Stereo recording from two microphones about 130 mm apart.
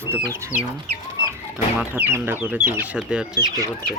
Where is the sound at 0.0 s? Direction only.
20° right (ahead or behind).